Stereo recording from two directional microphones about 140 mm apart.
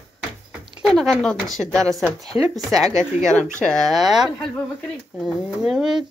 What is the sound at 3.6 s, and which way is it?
Speech, 5° left (ahead or behind).